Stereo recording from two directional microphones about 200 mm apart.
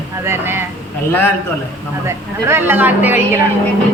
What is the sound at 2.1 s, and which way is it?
Speech, 10° right (ahead or behind).